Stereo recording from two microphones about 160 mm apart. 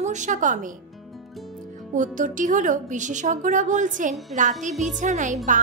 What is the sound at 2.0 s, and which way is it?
Speech, 50° right (ahead or behind).